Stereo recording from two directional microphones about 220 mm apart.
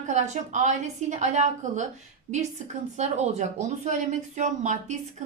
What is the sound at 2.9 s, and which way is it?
A woman's voice, 30° right (ahead or behind).